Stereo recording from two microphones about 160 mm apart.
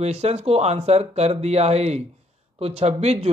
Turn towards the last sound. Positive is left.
turn(degrees=-40)  # may be behind; listen again after turning